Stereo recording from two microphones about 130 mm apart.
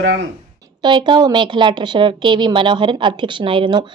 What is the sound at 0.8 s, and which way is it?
Speech, 35° right (ahead or behind).